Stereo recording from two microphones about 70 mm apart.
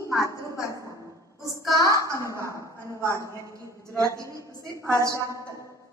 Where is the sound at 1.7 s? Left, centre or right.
Left.